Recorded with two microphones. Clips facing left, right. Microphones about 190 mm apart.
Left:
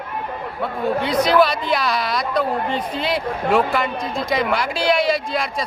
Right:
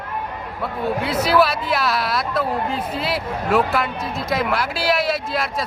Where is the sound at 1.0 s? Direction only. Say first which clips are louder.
Left 2 dB; 5° right (ahead or behind).